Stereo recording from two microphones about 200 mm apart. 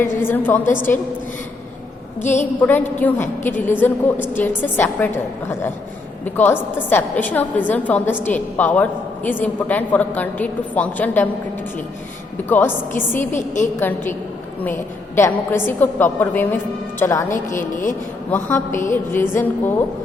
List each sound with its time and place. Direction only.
0.0 s a woman's voice: 10° left (ahead or behind)
2.6 s a woman's voice: 10° left (ahead or behind)
6.3 s a woman's voice: 10° left (ahead or behind)
12.5 s a woman's voice: 10° left (ahead or behind)
13.1 s speech: 40° left (ahead or behind)
13.7 s a woman's voice: 10° left (ahead or behind)
17.3 s speech: 40° left (ahead or behind)
18.3 s a woman's voice: 10° left (ahead or behind)